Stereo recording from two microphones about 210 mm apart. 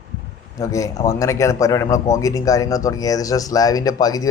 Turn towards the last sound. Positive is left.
turn(degrees=15)  # may be behind; listen again after turning